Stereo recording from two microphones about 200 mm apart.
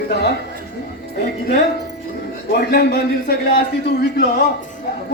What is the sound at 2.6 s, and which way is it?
Speech, 55° left (ahead or behind).